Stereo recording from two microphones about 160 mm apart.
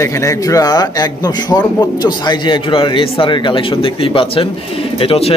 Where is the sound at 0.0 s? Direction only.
20° left (ahead or behind).